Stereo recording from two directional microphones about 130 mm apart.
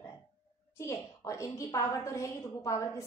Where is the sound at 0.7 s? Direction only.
25° left (ahead or behind).